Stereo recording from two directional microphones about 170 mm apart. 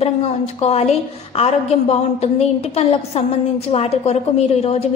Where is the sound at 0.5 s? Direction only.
40° left (ahead or behind).